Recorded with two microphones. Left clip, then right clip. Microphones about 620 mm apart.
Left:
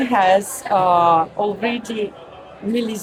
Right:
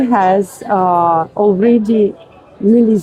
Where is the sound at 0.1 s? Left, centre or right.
Right.